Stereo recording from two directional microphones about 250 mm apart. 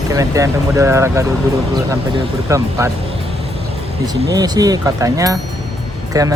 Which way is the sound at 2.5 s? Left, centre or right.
Centre.